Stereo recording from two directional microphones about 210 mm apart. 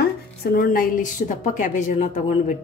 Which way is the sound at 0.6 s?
40° left (ahead or behind).